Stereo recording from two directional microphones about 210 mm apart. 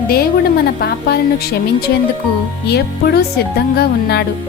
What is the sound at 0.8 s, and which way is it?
Speech, 50° left (ahead or behind).